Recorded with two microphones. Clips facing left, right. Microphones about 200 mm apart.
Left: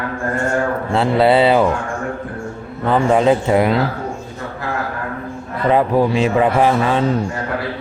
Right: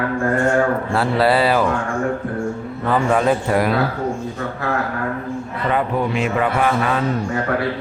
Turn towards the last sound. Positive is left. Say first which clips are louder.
# left 4 dB
turn(degrees=30)  # may be behind; listen again after turning